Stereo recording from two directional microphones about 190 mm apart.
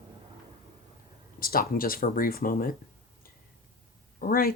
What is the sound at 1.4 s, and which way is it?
Speech, 50° left (ahead or behind).